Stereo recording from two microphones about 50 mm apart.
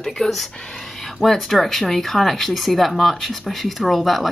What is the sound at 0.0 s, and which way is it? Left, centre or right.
A woman's voice, centre.